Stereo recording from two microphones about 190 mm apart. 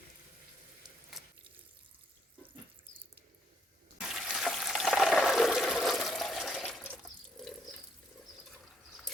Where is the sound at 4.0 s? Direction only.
Centre (ahead or behind).